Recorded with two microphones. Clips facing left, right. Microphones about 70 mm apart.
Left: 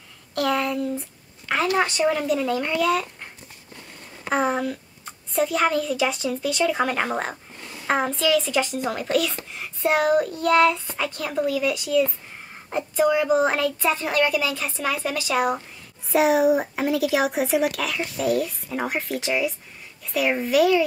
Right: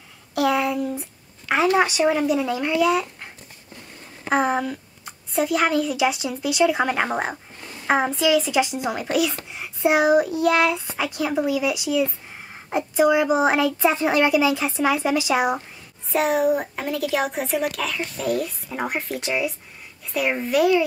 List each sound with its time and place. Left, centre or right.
0.3 s a sound: centre
1.8 s speech: centre
4.2 s a woman's voice: centre
16.1 s a child's voice: centre